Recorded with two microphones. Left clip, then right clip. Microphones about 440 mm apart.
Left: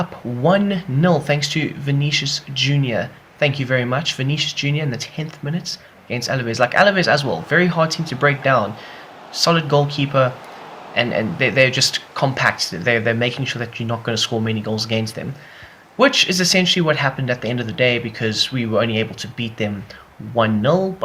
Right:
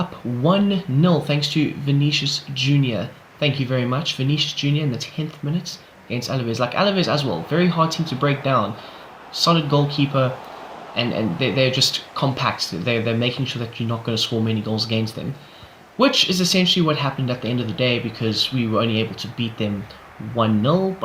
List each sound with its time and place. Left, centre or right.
0.4 s speech: centre